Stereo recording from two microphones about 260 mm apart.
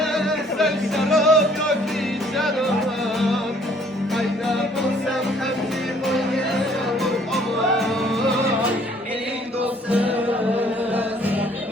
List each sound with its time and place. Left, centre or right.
0.6 s music: centre
6.1 s music: centre